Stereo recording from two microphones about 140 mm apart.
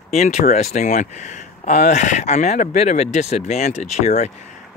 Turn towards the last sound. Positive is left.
turn(degrees=55)  # may be behind; listen again after turning